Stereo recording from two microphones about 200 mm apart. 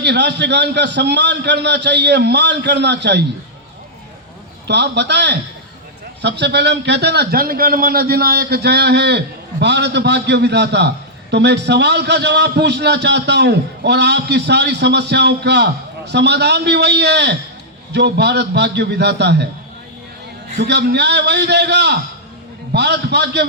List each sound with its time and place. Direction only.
0.0 s a man's voice: 60° right (ahead or behind)
4.6 s a man's voice: 60° right (ahead or behind)
20.6 s a man's voice: 55° right (ahead or behind)